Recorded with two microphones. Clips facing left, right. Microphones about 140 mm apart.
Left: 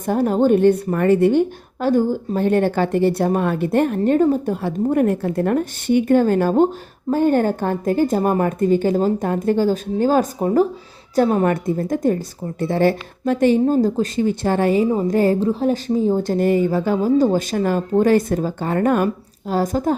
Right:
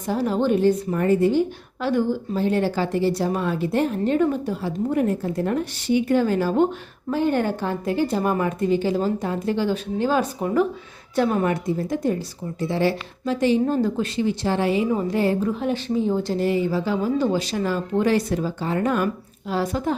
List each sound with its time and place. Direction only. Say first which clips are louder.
0.0 s a woman's voice: left 5 dB; 50° left (ahead or behind)
4.9 s a woman's voice: left 5 dB; 60° left (ahead or behind)
13.7 s a woman's voice: left 5 dB; 35° left (ahead or behind)
15.4 s a woman's voice: left 5 dB; 30° left (ahead or behind)